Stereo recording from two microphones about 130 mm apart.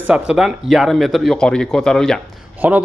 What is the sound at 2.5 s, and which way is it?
Speech, 10° right (ahead or behind).